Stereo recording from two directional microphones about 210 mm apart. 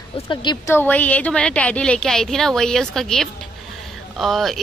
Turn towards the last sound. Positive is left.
turn(degrees=0)  # may be behind; listen again after turning